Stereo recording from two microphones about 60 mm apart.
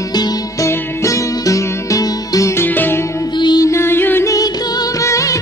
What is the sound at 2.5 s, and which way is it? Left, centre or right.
Music, left.